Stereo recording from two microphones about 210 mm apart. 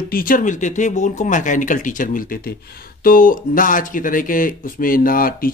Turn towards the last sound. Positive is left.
turn(degrees=45)  # may be behind; listen again after turning